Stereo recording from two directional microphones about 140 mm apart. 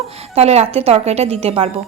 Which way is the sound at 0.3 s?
50° right (ahead or behind).